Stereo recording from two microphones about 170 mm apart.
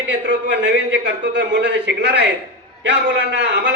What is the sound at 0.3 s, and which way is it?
A man's voice, 90° right.